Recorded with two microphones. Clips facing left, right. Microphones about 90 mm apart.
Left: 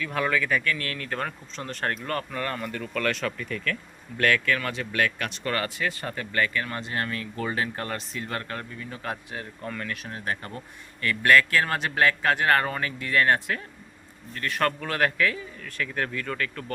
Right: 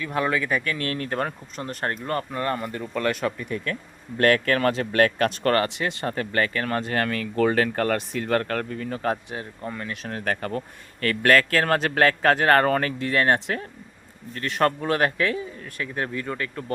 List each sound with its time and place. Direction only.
0.0 s a man's voice: 20° right (ahead or behind)
1.6 s a man's voice: 25° right (ahead or behind)
4.2 s speech: 40° right (ahead or behind)
5.6 s a man's voice: 25° right (ahead or behind)
6.1 s speech: 40° right (ahead or behind)
6.9 s speech: 85° right; by 9.1 s 45° right (ahead or behind)
9.3 s a man's voice: 20° right (ahead or behind)
10.1 s speech: 60° right (ahead or behind)
11.0 s speech: 50° right (ahead or behind)
13.0 s a man's voice: 35° right (ahead or behind)